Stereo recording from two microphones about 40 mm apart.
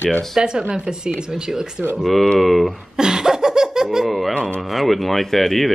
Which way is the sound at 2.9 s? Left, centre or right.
Centre.